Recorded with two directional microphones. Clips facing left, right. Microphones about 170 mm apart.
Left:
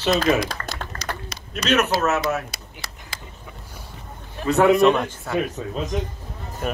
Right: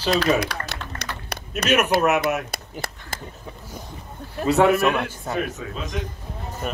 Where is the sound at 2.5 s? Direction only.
55° right (ahead or behind).